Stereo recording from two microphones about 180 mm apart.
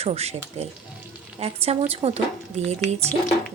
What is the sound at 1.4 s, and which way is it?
Speech, 35° right (ahead or behind).